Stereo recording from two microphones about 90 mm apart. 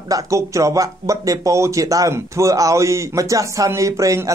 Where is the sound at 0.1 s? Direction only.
35° right (ahead or behind).